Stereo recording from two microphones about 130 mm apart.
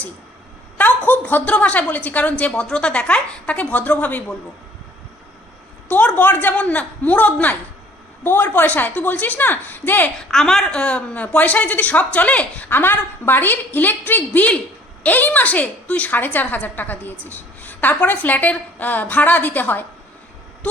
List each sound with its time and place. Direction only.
0.8 s a woman's voice: 15° left (ahead or behind)
5.9 s a woman's voice: 15° left (ahead or behind)